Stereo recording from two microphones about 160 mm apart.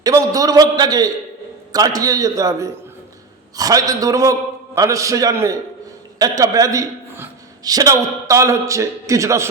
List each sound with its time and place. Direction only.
0.0 s a man's voice: 20° right (ahead or behind)